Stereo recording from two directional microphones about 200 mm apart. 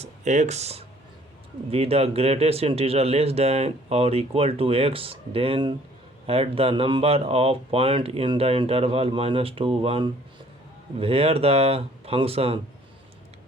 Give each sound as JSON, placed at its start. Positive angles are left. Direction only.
{"t": 0.0, "sound": "speech", "side_deg": -35}